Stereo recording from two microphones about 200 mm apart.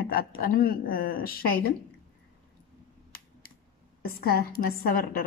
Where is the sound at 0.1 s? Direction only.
45° left (ahead or behind).